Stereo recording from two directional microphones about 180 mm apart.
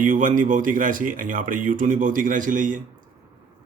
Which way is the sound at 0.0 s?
45° right (ahead or behind).